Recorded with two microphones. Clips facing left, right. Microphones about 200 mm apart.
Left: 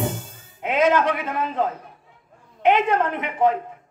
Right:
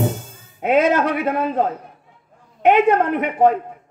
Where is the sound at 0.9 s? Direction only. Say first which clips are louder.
Right 3 dB; 50° right (ahead or behind).